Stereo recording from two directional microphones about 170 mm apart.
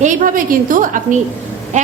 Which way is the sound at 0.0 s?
50° right (ahead or behind).